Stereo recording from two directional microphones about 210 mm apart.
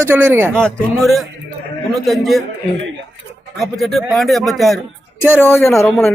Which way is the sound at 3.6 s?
Centre (ahead or behind).